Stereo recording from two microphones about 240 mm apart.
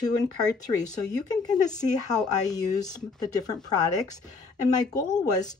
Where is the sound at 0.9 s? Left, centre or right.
Centre.